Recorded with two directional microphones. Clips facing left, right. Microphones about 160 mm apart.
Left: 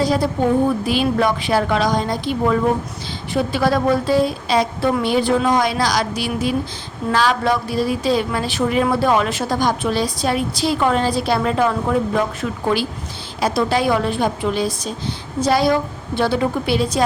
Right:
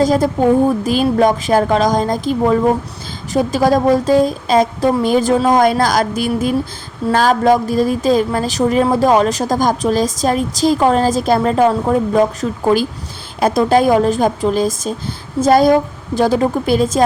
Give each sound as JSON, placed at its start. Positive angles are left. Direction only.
{"t": 0.0, "sound": "a woman's voice", "side_deg": -45}